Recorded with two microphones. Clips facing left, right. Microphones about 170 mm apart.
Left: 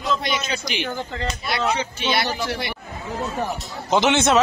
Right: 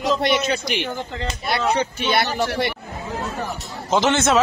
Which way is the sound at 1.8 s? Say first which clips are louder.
Right 2 dB; 55° right (ahead or behind).